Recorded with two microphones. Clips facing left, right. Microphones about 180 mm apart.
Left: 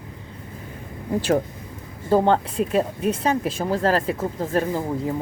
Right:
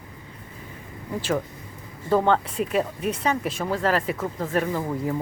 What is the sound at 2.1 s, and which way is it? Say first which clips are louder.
Speech: left 2 dB; 35° left (ahead or behind).